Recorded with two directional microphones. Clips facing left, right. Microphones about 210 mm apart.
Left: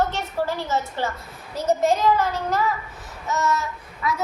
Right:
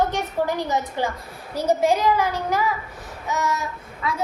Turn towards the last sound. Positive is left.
turn(degrees=-30)  # may be behind; listen again after turning